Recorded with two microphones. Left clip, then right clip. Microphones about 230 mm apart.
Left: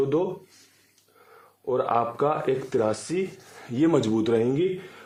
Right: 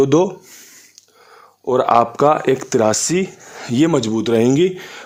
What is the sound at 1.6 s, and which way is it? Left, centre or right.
Speech, right.